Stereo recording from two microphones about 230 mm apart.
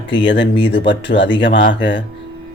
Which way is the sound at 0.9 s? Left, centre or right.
Left.